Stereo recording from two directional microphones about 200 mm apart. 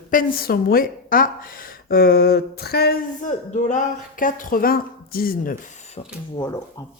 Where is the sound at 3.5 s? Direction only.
40° left (ahead or behind).